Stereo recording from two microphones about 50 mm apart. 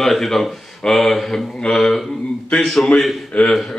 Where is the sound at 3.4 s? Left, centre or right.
Left.